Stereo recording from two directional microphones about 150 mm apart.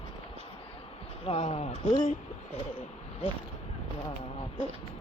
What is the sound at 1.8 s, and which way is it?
Speech, 60° left (ahead or behind).